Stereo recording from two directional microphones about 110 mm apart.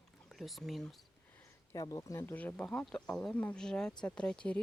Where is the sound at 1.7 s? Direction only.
30° left (ahead or behind).